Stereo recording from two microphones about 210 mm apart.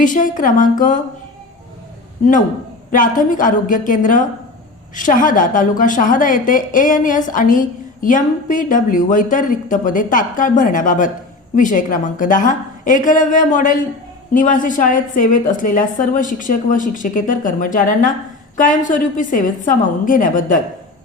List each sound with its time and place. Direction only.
0.0 s a woman's voice: 40° left (ahead or behind)
2.9 s a woman's voice: 40° left (ahead or behind)